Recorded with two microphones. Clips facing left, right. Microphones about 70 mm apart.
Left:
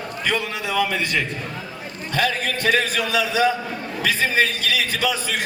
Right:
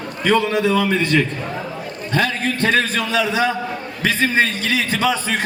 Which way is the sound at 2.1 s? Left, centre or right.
Right.